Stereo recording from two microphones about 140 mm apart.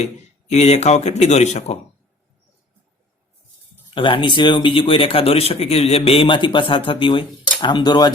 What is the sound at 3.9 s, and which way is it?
Speech, 35° left (ahead or behind).